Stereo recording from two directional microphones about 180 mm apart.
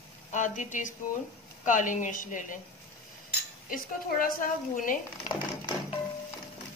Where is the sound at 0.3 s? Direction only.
45° left (ahead or behind).